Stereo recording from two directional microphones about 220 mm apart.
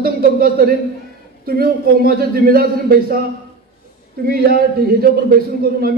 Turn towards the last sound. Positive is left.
turn(degrees=-45)  # may be behind; listen again after turning